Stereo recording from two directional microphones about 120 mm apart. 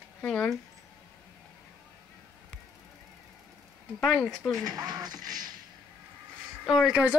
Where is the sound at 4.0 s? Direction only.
5° left (ahead or behind).